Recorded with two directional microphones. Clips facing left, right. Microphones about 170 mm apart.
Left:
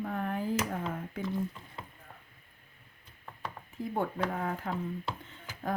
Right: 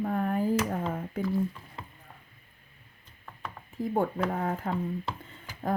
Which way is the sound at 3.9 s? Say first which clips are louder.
Right 4 dB; 40° right (ahead or behind).